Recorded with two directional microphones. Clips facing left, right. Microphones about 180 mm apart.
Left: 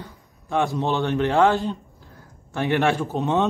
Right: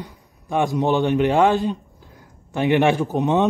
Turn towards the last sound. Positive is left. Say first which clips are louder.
# right 3 dB
turn(degrees=-15)  # may be behind; listen again after turning